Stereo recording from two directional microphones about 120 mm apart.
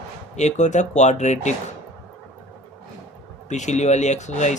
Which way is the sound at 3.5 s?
75° left (ahead or behind).